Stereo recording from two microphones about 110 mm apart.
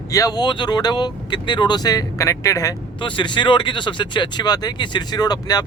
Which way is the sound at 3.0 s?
45° left (ahead or behind).